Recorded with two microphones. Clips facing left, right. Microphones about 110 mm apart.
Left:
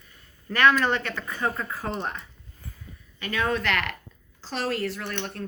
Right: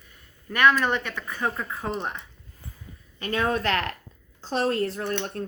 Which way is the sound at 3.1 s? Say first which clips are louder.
Right 1 dB; 35° right (ahead or behind).